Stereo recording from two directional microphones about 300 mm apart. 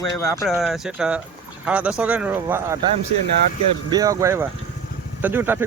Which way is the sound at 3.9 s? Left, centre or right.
Centre.